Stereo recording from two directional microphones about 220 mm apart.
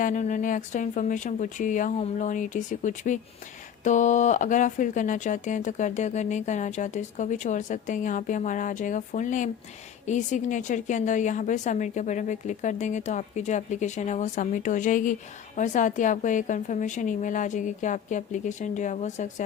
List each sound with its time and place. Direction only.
0.0 s speech: 35° left (ahead or behind)